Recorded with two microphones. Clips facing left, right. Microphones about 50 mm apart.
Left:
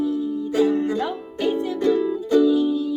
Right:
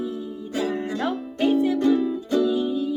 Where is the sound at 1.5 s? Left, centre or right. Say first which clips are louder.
Right 1 dB; centre.